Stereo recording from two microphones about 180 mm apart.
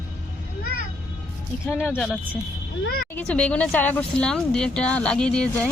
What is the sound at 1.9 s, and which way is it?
Speech, 5° left (ahead or behind).